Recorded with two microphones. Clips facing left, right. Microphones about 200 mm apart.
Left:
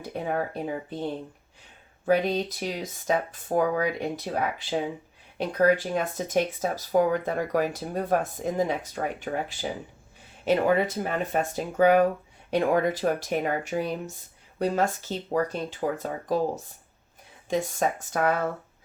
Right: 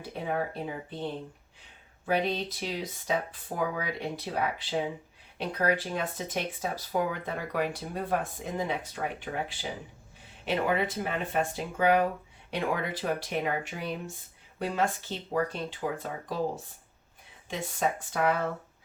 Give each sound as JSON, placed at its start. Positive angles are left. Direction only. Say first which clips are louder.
{"t": 0.0, "sound": "speech", "louder": "left 3 dB", "side_deg": 45}
{"t": 2.0, "sound": "speech", "louder": "left 5 dB", "side_deg": 45}
{"t": 17.5, "sound": "speech", "louder": "left 5 dB", "side_deg": 45}